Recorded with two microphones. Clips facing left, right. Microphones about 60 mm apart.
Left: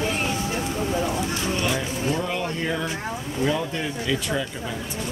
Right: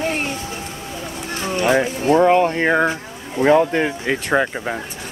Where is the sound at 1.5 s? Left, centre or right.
Right.